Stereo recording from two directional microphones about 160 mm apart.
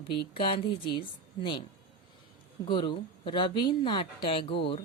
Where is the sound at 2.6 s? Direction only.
30° left (ahead or behind).